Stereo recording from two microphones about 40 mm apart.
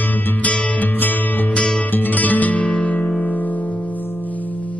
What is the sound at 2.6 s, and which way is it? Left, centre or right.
Music, left.